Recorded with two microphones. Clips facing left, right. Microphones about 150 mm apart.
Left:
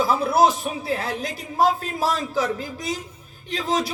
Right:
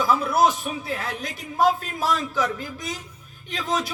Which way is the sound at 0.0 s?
30° left (ahead or behind).